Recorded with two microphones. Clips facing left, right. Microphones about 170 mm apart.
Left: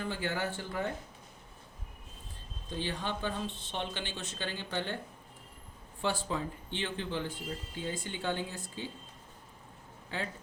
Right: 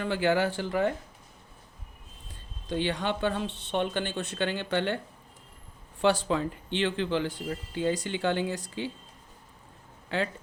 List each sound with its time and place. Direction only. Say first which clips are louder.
0.0 s speech: right 9 dB; 80° right
2.6 s speech: right 7 dB; 80° right
6.0 s speech: right 8 dB; 80° right
10.1 s speech: right 8 dB; 80° right